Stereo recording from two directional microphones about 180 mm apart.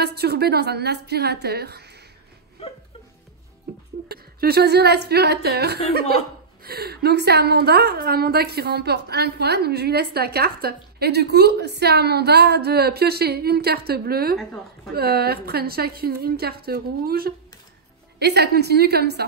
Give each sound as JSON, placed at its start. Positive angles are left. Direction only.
{"t": 0.0, "sound": "a woman's voice", "side_deg": -65}
{"t": 4.1, "sound": "a woman's voice", "side_deg": -60}